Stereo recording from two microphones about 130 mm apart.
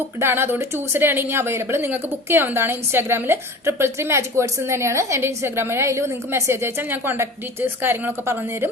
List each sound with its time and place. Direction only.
0.2 s a woman's voice: 20° right (ahead or behind)